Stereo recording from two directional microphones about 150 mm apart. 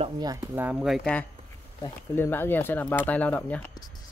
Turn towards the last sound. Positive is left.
turn(degrees=10)  # may be behind; listen again after turning